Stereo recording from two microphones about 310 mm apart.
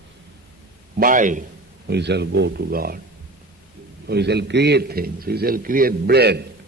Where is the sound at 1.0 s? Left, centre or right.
Right.